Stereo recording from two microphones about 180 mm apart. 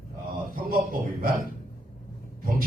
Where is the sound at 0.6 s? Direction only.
55° right (ahead or behind).